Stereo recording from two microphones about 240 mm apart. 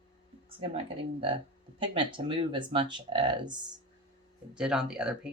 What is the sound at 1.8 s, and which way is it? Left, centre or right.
Speech, right.